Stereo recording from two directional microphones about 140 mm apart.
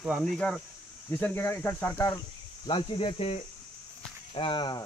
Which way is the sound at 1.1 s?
15° left (ahead or behind).